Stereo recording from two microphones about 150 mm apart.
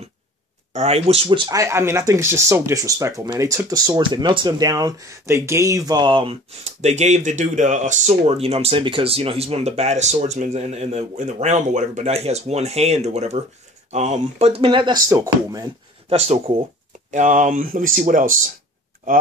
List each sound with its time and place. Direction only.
0.7 s speech: 45° right (ahead or behind); by 15.6 s 20° right (ahead or behind)
16.1 s speech: 40° right (ahead or behind)
17.1 s speech: 55° right (ahead or behind)